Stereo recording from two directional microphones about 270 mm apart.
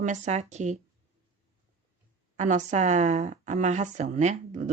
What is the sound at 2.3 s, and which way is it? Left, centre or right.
A woman's voice, right.